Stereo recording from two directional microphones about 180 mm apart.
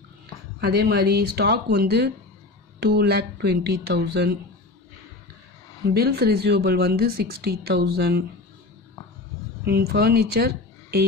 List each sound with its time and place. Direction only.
0.6 s speech: 60° right (ahead or behind)
5.9 s speech: 60° right (ahead or behind)
9.7 s speech: 60° right (ahead or behind)